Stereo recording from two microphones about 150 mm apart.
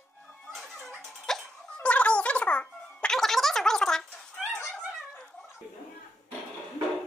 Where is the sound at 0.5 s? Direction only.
Centre (ahead or behind).